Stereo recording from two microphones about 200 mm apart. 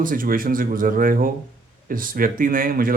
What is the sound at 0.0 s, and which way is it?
Speech, 45° right (ahead or behind).